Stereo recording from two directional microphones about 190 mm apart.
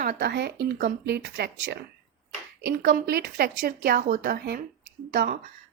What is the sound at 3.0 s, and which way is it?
Speech, 55° right (ahead or behind).